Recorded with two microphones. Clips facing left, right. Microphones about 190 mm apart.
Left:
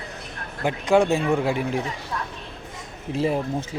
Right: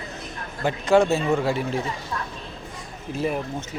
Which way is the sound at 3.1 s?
25° left (ahead or behind).